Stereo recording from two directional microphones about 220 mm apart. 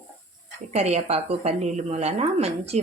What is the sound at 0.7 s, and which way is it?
A woman's voice, 30° right (ahead or behind).